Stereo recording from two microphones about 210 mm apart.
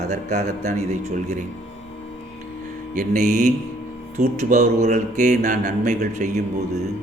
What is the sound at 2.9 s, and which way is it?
A man's voice, 35° right (ahead or behind).